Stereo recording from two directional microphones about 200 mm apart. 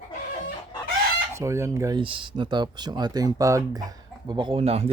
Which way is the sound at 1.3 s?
15° right (ahead or behind).